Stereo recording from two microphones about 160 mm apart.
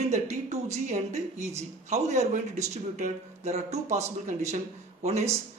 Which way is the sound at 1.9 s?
45° right (ahead or behind).